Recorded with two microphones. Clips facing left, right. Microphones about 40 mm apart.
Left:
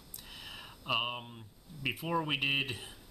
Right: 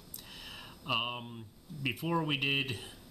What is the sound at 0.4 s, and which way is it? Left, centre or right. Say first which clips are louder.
Speech: left 1 dB; centre.